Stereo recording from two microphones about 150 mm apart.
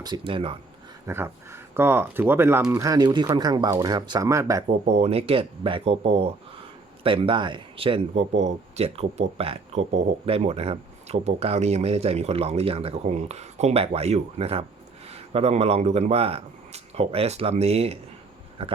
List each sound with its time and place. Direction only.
0.0 s speech: 30° right (ahead or behind)
1.0 s speech: 15° right (ahead or behind)
4.9 s a man's voice: 45° right (ahead or behind)